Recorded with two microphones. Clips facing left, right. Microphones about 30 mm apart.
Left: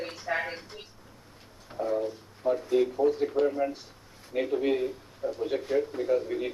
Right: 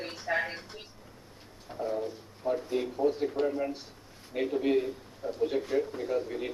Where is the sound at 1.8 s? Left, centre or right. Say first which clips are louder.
Left 4 dB; centre.